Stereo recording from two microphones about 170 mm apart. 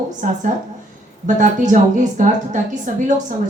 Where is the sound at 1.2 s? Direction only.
50° right (ahead or behind).